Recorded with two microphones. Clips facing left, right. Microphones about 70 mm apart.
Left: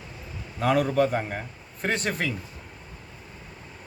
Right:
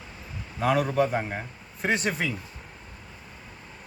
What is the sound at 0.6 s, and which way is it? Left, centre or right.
Speech, centre.